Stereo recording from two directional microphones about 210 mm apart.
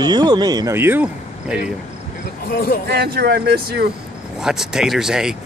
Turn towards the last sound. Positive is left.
turn(degrees=-5)  # may be behind; listen again after turning